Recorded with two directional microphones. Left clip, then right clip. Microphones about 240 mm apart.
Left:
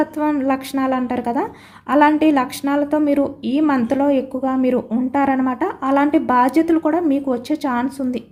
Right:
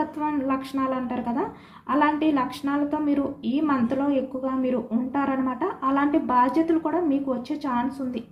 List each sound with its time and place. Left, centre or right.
0.0 s a woman's voice: left